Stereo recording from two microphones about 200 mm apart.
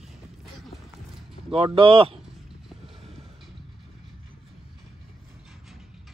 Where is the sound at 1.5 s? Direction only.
30° right (ahead or behind).